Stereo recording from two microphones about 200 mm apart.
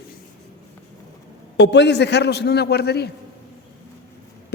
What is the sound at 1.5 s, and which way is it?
A man's voice, 60° left (ahead or behind).